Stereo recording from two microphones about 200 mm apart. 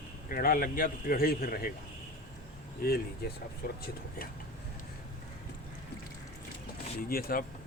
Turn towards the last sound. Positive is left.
turn(degrees=45)  # may be behind; listen again after turning